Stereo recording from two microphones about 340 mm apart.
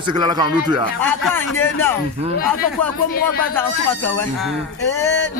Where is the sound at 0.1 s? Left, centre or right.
Centre.